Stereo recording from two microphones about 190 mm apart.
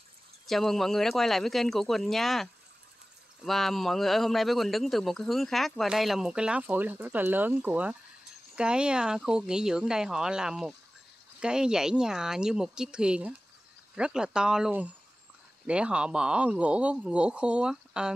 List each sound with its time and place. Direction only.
0.5 s a man's voice: centre (ahead or behind)